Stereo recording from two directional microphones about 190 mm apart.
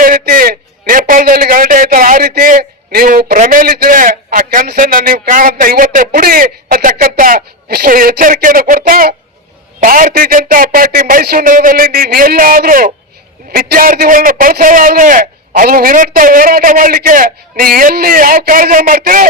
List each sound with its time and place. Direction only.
0.0 s a man's voice: 45° right (ahead or behind)